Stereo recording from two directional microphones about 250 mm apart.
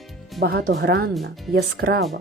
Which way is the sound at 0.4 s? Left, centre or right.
Right.